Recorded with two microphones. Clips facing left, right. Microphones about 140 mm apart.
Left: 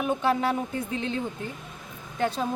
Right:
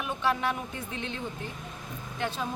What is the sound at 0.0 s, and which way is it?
Speech, 35° left (ahead or behind).